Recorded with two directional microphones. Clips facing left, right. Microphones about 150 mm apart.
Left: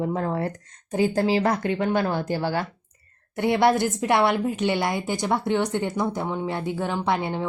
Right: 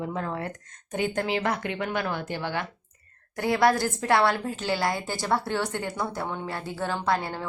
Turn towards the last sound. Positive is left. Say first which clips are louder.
# left 3 dB
turn(degrees=20)  # may be behind; listen again after turning